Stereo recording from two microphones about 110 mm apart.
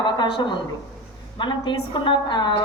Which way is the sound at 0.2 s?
45° left (ahead or behind).